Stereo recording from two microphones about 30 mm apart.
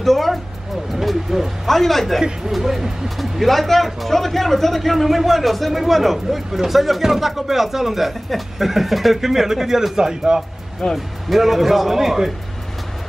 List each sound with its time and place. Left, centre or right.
0.0 s vehicle: centre
1.0 s vehicle: centre
1.7 s speech: centre
2.5 s speech: centre
3.4 s a man's voice: centre; by 10.4 s right
10.8 s speech: left
11.2 s speech: centre